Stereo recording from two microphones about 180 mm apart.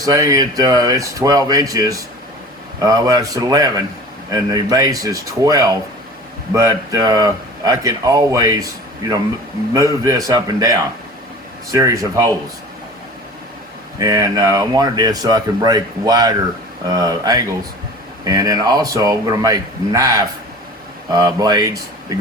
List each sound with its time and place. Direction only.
0.0 s speech: 20° right (ahead or behind)
14.0 s speech: 20° right (ahead or behind)